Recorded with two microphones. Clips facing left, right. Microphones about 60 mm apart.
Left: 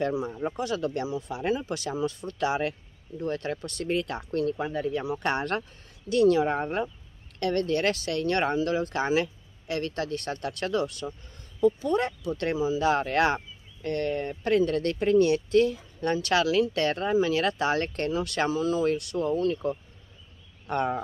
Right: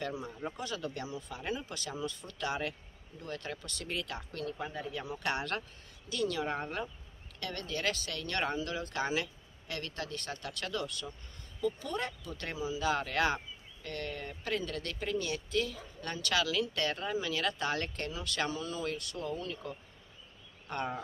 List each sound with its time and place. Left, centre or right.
0.1 s speech: left
1.6 s speech: left
4.6 s speech: left
5.2 s speech: left
18.9 s speech: left
20.7 s speech: left